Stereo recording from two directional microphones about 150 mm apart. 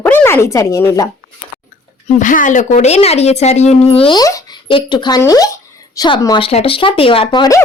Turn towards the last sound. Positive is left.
turn(degrees=30)  # may be behind; listen again after turning